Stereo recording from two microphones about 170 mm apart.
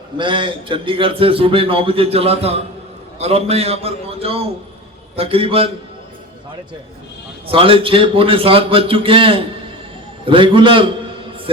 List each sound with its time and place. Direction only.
0.2 s a man's voice: 30° right (ahead or behind)
7.4 s a man's voice: 35° right (ahead or behind)